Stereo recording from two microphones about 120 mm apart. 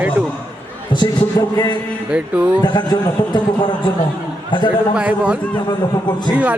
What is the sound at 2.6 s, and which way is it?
A man's voice, 35° left (ahead or behind).